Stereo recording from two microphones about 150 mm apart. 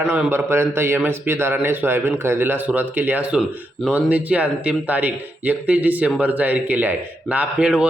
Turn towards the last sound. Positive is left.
turn(degrees=-10)  # may be behind; listen again after turning